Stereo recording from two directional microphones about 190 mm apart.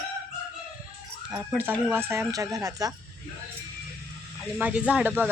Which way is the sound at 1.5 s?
10° right (ahead or behind).